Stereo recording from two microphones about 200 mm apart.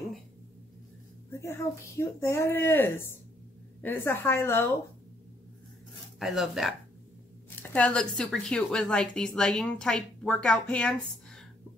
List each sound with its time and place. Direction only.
1.3 s a child's voice: 15° left (ahead or behind)
6.1 s speech: centre (ahead or behind)